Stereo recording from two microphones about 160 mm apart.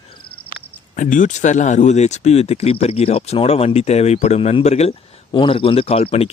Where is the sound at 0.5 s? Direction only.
55° left (ahead or behind).